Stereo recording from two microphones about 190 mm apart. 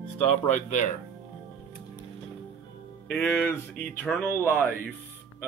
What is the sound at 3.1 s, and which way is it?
Speech, 5° left (ahead or behind).